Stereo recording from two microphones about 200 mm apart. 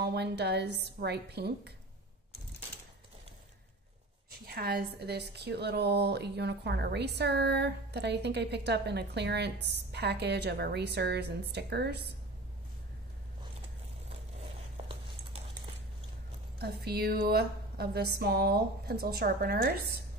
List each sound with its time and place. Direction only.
0.0 s a woman's voice: 55° right (ahead or behind)
4.3 s a woman's voice: 50° right (ahead or behind)
16.5 s a woman's voice: 50° right (ahead or behind)